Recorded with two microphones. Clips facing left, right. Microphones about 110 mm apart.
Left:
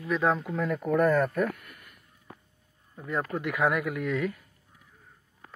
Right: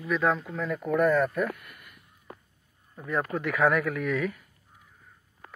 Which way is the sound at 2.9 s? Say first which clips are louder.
Right 2 dB; 20° right (ahead or behind).